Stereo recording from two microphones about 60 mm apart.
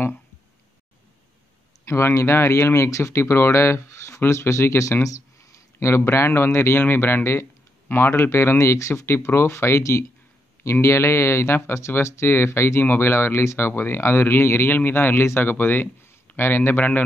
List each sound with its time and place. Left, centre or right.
1.9 s speech: left
12.8 s speech: left
15.5 s a man's voice: left